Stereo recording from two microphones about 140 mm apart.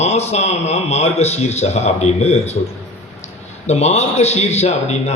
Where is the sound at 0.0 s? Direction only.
50° left (ahead or behind).